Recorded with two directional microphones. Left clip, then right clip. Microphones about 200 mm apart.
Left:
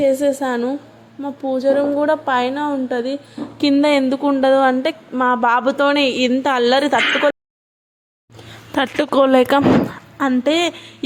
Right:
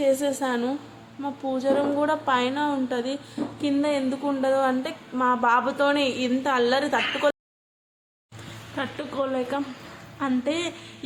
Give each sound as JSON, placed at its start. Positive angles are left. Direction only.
{"t": 0.0, "sound": "a woman's voice", "side_deg": 25}
{"t": 3.6, "sound": "speech", "side_deg": 35}
{"t": 8.7, "sound": "speech", "side_deg": 45}
{"t": 10.2, "sound": "speech", "side_deg": 35}